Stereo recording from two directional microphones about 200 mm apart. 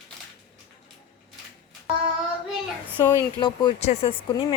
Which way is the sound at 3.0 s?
20° left (ahead or behind).